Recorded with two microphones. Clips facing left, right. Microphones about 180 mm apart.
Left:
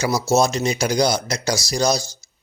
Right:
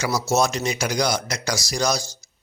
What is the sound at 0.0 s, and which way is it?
Speech, 25° left (ahead or behind).